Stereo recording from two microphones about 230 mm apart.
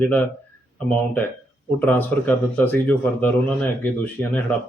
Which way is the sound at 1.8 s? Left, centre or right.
Centre.